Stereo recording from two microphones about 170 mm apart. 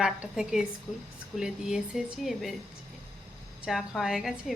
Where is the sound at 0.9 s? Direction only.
15° left (ahead or behind).